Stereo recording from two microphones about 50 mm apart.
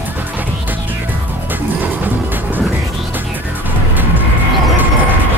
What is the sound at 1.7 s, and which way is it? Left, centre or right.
Music, right.